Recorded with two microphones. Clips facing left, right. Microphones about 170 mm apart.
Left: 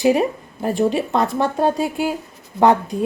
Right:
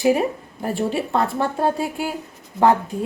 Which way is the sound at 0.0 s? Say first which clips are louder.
Left 2 dB; 20° left (ahead or behind).